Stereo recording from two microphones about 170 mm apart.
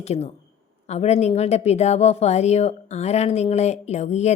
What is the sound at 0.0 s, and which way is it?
A woman's voice, 40° left (ahead or behind).